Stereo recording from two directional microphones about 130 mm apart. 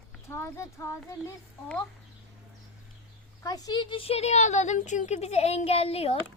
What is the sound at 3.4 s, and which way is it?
A woman's voice, 30° left (ahead or behind).